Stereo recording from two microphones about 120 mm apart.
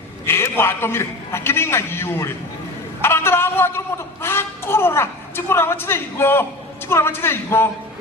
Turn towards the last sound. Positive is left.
turn(degrees=20)  # may be behind; listen again after turning